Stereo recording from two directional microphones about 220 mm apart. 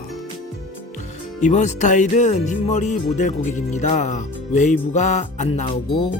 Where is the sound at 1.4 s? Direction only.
35° left (ahead or behind).